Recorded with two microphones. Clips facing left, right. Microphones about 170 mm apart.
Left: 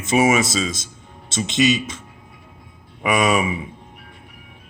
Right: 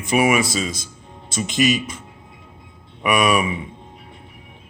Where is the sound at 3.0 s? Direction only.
25° left (ahead or behind).